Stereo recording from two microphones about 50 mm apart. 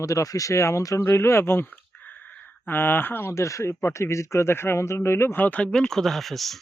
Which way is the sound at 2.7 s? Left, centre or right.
Left.